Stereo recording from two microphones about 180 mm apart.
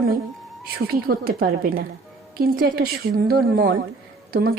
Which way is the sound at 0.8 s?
60° right (ahead or behind).